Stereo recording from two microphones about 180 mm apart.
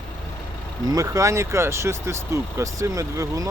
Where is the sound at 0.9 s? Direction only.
20° right (ahead or behind).